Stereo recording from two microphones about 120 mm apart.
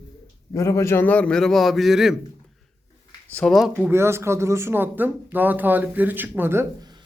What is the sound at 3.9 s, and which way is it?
Speech, 20° right (ahead or behind).